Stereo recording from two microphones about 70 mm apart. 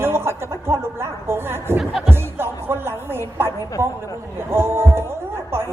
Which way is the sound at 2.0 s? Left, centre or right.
Right.